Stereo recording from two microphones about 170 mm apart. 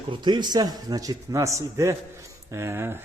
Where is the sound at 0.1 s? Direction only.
25° right (ahead or behind).